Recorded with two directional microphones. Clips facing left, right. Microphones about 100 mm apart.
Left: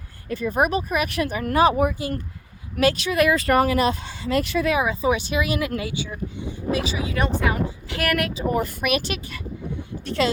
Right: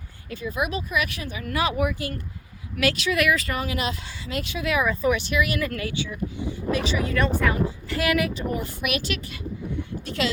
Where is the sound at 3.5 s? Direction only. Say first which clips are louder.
Left 9 dB; 55° left (ahead or behind).